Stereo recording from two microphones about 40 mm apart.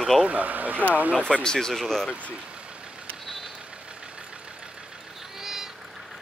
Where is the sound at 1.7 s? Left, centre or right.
Centre.